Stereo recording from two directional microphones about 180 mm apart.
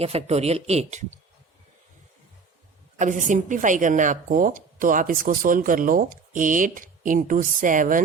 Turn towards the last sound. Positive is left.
turn(degrees=-45)  # may be behind; listen again after turning